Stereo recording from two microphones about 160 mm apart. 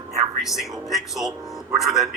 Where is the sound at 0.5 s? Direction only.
Centre (ahead or behind).